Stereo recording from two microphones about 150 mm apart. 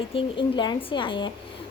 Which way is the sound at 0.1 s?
35° left (ahead or behind).